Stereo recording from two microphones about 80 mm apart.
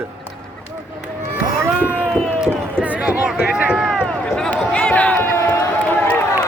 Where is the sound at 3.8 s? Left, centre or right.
Centre.